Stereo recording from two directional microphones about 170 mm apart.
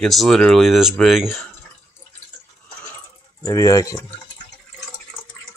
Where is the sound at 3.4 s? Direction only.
20° left (ahead or behind).